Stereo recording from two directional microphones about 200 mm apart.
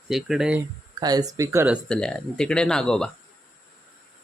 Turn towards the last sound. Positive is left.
turn(degrees=5)  # may be behind; listen again after turning